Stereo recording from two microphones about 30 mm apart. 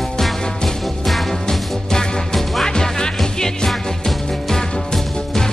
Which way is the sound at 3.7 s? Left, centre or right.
Centre.